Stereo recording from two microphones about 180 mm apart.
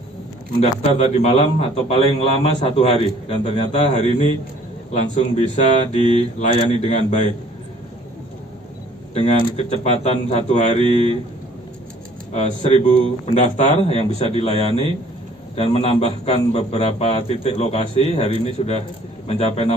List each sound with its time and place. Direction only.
0.6 s a man's voice: 40° left (ahead or behind)
9.1 s a man's voice: 35° left (ahead or behind)
12.7 s a man's voice: 35° left (ahead or behind)